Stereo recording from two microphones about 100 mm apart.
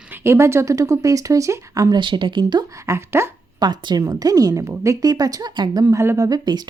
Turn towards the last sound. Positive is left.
turn(degrees=-45)  # may be behind; listen again after turning